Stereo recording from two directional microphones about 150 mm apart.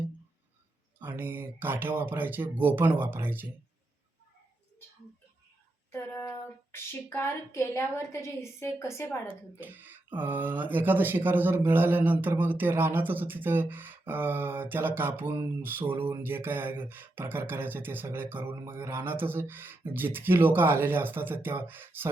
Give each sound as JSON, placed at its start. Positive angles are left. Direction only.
{"t": 0.9, "sound": "speech", "side_deg": -15}
{"t": 5.9, "sound": "speech", "side_deg": 15}
{"t": 9.6, "sound": "speech", "side_deg": -15}